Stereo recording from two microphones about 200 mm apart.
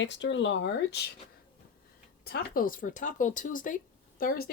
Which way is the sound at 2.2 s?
50° left (ahead or behind).